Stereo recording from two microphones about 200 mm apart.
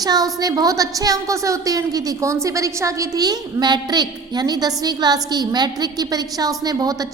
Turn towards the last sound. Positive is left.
turn(degrees=-20)  # may be behind; listen again after turning